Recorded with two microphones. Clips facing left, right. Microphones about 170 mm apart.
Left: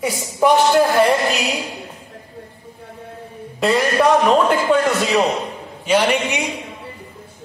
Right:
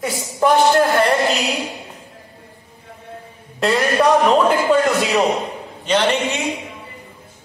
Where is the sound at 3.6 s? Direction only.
Centre (ahead or behind).